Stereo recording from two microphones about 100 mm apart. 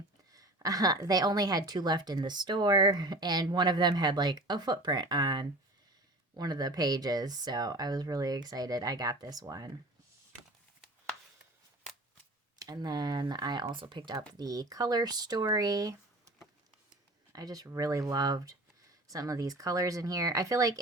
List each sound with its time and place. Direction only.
0.3 s a woman's voice: 35° right (ahead or behind)
12.5 s a woman's voice: 40° right (ahead or behind)
13.7 s speech: 55° right (ahead or behind); by 16.3 s 35° right (ahead or behind)
17.3 s speech: 35° right (ahead or behind)